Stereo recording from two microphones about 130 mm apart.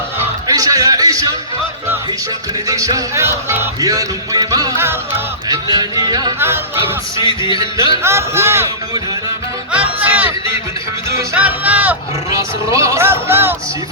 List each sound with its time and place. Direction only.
0.4 s music: 25° right (ahead or behind)
2.6 s music: 25° right (ahead or behind)
6.4 s speech: 15° right (ahead or behind)
7.3 s music: 40° left (ahead or behind)
8.0 s music: 20° right (ahead or behind)
10.1 s a sound: 15° right (ahead or behind)
11.3 s speech: 10° right (ahead or behind)
12.3 s music: 25° right (ahead or behind)